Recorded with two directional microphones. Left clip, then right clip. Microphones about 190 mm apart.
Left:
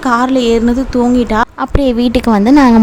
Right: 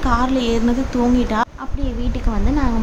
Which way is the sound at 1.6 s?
60° left (ahead or behind).